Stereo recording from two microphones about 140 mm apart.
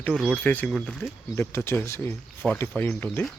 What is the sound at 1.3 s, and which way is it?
Speech, 20° left (ahead or behind).